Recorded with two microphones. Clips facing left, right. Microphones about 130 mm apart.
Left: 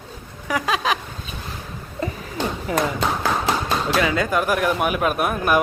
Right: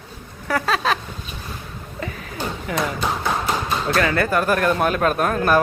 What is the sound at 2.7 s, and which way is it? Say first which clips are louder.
Speech: left 2 dB; 30° left (ahead or behind).